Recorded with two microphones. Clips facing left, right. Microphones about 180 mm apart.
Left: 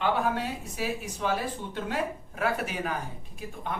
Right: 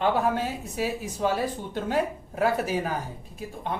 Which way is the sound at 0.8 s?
35° right (ahead or behind).